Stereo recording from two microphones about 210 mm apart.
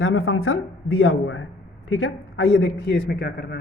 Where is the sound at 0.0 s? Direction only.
70° left (ahead or behind).